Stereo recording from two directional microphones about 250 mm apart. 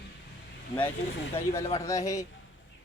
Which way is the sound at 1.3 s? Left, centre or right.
Centre.